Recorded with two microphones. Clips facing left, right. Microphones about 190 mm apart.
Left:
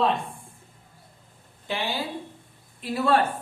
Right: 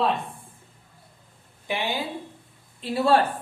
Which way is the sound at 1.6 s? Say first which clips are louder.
Right 1 dB; 15° right (ahead or behind).